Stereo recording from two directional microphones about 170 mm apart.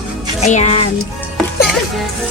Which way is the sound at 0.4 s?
40° left (ahead or behind).